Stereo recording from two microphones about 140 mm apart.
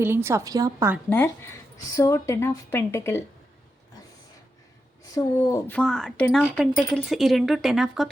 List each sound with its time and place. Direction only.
0.0 s a woman's voice: 15° right (ahead or behind)
1.1 s speech: 15° left (ahead or behind)
5.1 s speech: 25° left (ahead or behind)
5.6 s speech: 5° left (ahead or behind)